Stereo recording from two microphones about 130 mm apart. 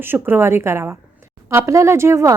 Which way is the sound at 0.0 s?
15° right (ahead or behind).